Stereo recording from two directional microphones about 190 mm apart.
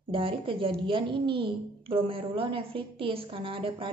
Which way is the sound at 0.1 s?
25° right (ahead or behind).